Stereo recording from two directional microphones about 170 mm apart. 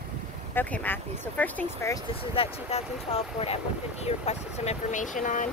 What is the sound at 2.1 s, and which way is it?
Speech, 35° left (ahead or behind).